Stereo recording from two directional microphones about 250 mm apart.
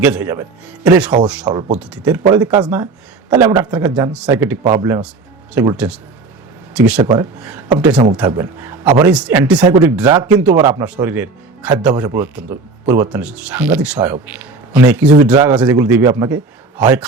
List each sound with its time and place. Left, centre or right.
0.0 s speech: centre